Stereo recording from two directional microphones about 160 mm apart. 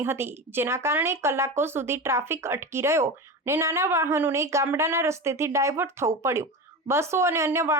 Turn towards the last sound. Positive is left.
turn(degrees=-15)  # may be behind; listen again after turning